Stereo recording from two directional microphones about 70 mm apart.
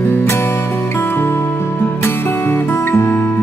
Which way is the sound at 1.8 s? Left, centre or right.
Left.